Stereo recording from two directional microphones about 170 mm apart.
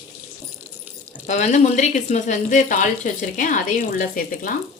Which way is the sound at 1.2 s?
45° left (ahead or behind).